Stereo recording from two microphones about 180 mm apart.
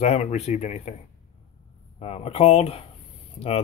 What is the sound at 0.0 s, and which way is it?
Speech, 40° left (ahead or behind).